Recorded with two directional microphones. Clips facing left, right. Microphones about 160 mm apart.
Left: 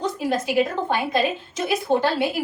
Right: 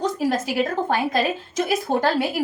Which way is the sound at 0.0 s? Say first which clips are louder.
Right 2 dB; 45° right (ahead or behind).